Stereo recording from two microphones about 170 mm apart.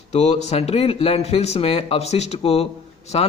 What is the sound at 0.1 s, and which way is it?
A man's voice, 40° left (ahead or behind).